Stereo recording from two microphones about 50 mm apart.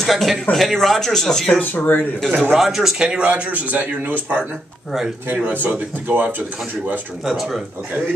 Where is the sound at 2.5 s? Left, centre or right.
Centre.